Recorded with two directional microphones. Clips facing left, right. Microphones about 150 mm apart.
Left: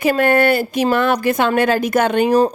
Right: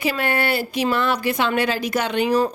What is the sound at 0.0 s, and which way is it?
A woman's voice, 50° left (ahead or behind).